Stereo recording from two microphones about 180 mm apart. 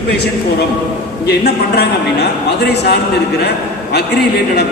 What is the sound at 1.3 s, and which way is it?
Speech, 65° left (ahead or behind).